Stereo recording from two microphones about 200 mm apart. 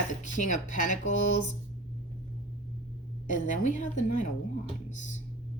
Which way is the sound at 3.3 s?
40° left (ahead or behind).